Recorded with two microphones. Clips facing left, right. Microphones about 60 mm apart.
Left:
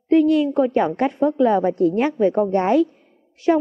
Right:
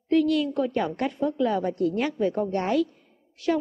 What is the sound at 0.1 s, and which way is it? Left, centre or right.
A woman's voice, left.